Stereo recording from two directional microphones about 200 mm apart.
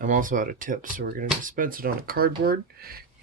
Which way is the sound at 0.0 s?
40° right (ahead or behind).